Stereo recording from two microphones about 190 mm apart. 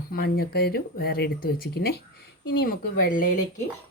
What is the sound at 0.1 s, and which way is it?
Speech, 50° left (ahead or behind).